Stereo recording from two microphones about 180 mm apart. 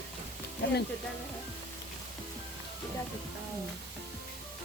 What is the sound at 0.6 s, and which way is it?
Speech, 70° left (ahead or behind).